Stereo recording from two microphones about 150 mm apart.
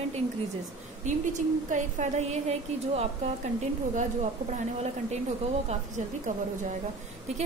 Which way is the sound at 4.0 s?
50° right (ahead or behind).